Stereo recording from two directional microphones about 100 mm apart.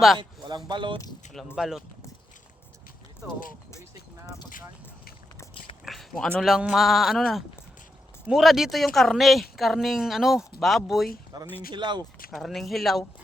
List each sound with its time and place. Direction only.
0.2 s speech: 50° right (ahead or behind)
1.5 s speech: 5° right (ahead or behind)
5.8 s a sound: centre (ahead or behind)
6.4 s speech: 5° right (ahead or behind)
11.3 s speech: 45° right (ahead or behind)
12.3 s speech: centre (ahead or behind)